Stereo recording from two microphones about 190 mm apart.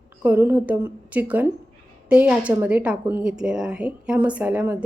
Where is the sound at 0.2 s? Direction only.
10° right (ahead or behind).